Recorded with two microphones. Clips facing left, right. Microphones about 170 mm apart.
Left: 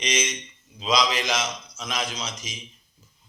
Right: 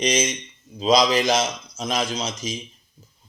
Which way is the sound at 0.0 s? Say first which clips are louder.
Right 6 dB; 35° right (ahead or behind).